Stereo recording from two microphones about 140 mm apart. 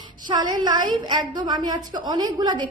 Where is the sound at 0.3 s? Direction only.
30° right (ahead or behind).